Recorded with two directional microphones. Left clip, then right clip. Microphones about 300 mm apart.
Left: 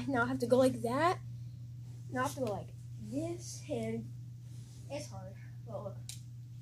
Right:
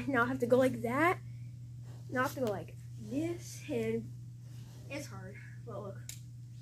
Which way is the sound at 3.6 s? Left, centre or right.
Left.